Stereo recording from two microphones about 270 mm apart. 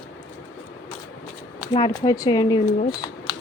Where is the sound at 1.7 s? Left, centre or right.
Centre.